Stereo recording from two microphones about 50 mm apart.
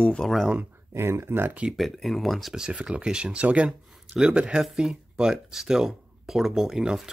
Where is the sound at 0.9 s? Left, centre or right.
Right.